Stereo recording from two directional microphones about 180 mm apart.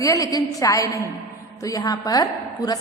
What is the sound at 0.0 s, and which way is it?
A woman's voice, 20° left (ahead or behind).